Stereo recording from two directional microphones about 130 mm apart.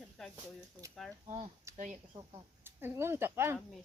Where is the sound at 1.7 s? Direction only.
70° right (ahead or behind).